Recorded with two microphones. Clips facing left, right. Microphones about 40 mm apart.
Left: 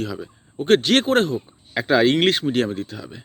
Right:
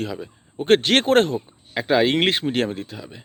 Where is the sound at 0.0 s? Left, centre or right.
Right.